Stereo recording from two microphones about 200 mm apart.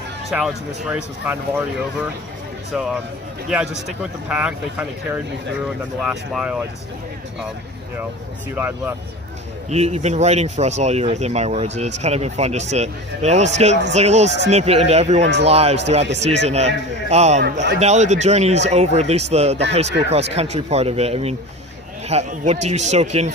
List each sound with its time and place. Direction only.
0.3 s speech: 5° right (ahead or behind)
8.5 s speech: 10° right (ahead or behind)
9.6 s speech: 35° right (ahead or behind)
17.4 s a man's voice: 60° right (ahead or behind)
17.7 s speech: 35° right (ahead or behind)